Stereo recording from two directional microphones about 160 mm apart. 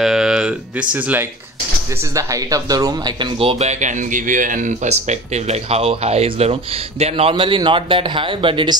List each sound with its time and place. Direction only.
0.0 s speech: 5° right (ahead or behind); by 8.7 s 30° right (ahead or behind)